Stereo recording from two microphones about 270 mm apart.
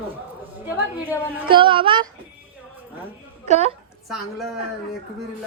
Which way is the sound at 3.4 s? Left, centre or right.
Right.